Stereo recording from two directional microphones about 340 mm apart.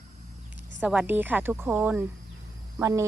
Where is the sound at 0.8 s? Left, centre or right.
Centre.